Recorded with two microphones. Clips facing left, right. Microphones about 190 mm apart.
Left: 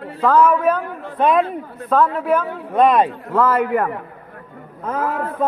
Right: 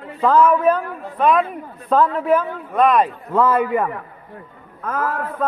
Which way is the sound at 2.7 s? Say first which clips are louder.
Left 1 dB; 30° left (ahead or behind).